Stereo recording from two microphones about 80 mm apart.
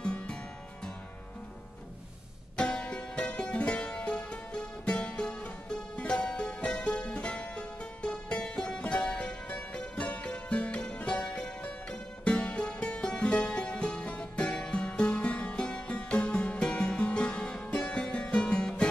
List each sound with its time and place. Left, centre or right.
0.0 s music: centre
2.5 s music: centre